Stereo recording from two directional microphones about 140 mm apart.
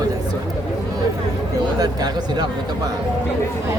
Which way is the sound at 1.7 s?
30° right (ahead or behind).